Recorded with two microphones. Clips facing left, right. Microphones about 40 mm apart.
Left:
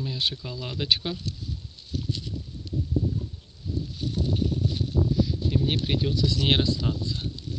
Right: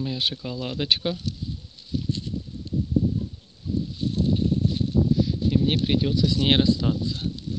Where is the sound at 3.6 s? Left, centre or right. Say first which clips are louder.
Right 5 dB; centre.